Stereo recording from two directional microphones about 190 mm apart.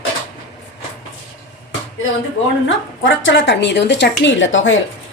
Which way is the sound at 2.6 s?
85° left.